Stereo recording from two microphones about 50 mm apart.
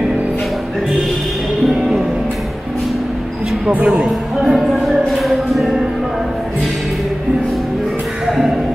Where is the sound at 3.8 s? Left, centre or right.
Right.